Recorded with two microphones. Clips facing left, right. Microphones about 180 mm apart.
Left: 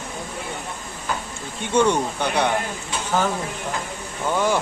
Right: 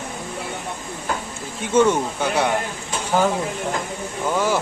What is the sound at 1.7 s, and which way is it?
Speech, 5° right (ahead or behind).